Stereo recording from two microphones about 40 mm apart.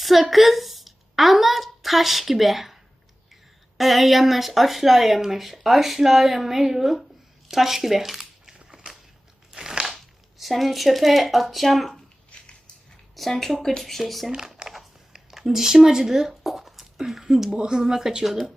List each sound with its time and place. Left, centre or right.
0.0 s speech: centre
3.8 s speech: centre
12.3 s a sound: left
13.1 s speech: centre
14.3 s a sound: centre
15.3 s speech: centre